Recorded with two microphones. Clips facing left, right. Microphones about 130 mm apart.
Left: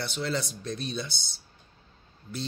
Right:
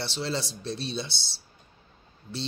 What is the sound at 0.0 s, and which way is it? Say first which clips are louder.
A man's voice: even; 30° right (ahead or behind).